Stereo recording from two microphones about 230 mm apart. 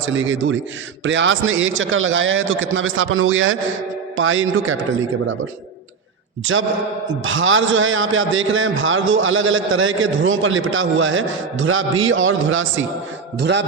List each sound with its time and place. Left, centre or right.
0.0 s a man's voice: right
6.5 s a man's voice: right